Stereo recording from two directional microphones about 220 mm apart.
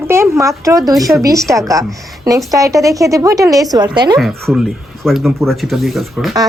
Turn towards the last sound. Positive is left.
turn(degrees=0)  # may be behind; listen again after turning